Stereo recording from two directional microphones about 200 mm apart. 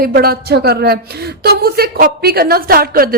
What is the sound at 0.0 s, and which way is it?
A woman's voice, 50° right (ahead or behind).